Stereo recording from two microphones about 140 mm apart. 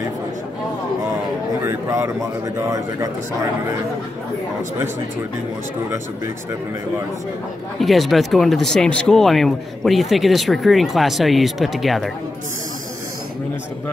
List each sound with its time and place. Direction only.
1.7 s speech: 20° right (ahead or behind)
7.8 s speech: centre (ahead or behind)